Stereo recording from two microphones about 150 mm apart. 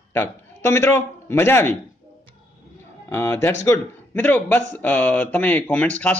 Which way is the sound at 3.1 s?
15° left (ahead or behind).